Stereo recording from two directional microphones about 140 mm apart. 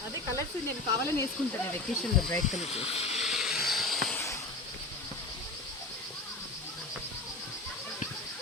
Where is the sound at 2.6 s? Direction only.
45° left (ahead or behind).